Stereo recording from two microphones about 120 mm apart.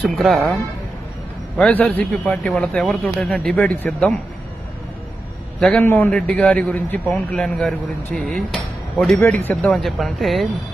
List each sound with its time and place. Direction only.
0.0 s speech: centre (ahead or behind)
1.5 s a man's voice: 10° left (ahead or behind)
5.5 s a man's voice: 5° left (ahead or behind)
5.8 s a man's voice: 20° left (ahead or behind)
6.1 s a man's voice: 5° left (ahead or behind)
9.7 s speech: centre (ahead or behind)